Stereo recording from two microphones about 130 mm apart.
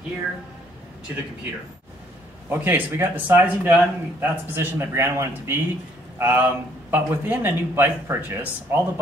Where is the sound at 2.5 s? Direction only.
15° right (ahead or behind).